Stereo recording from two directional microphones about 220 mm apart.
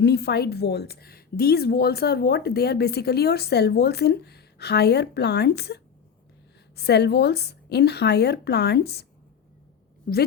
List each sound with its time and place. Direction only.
0.0 s a woman's voice: 50° left (ahead or behind)